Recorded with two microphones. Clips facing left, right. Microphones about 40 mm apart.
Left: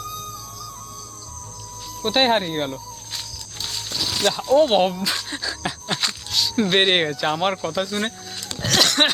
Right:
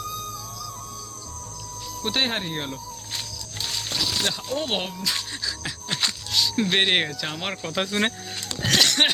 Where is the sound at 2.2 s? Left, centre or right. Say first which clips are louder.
Left 7 dB; centre.